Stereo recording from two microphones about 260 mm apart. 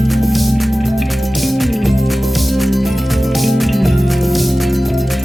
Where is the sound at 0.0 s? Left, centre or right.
Centre.